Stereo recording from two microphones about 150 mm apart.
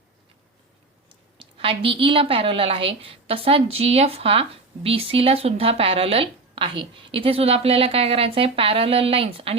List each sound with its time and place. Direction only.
1.4 s a woman's voice: 35° right (ahead or behind)